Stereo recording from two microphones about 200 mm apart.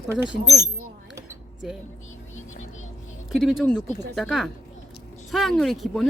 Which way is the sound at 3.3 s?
Centre (ahead or behind).